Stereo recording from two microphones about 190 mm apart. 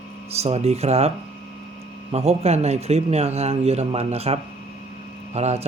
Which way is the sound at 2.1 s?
35° right (ahead or behind).